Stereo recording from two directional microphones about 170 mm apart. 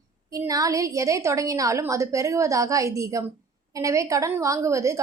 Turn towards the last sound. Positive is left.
turn(degrees=-20)  # may be behind; listen again after turning